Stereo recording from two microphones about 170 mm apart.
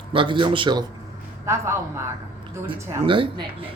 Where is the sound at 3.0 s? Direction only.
30° right (ahead or behind).